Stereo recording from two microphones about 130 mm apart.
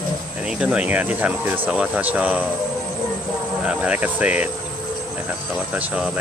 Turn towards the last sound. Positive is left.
turn(degrees=-10)  # may be behind; listen again after turning